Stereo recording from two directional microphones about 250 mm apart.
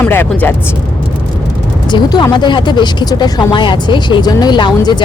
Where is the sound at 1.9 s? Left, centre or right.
Centre.